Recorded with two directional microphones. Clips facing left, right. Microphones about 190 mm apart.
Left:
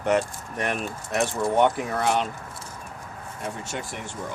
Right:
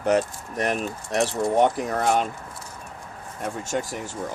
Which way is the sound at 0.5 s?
40° right (ahead or behind).